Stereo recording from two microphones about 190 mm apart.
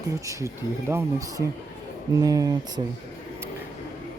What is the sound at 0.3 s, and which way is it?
Speech, 15° right (ahead or behind).